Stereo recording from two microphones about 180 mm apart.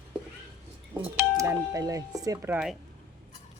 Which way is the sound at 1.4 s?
20° right (ahead or behind).